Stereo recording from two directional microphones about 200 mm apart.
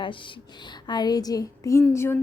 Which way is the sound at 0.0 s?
25° left (ahead or behind).